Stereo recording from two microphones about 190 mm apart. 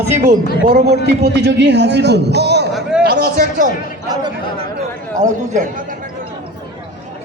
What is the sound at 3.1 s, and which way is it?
Speech, 45° right (ahead or behind).